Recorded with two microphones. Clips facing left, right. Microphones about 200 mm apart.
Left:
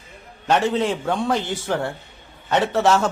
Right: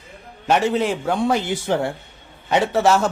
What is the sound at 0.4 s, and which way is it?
Speech, 5° right (ahead or behind).